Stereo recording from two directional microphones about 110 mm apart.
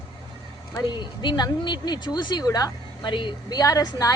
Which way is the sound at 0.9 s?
45° left (ahead or behind).